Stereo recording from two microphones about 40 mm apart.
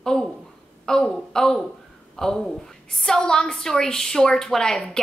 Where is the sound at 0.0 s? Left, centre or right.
Centre.